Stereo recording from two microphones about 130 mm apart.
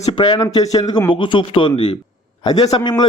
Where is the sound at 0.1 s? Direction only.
35° left (ahead or behind).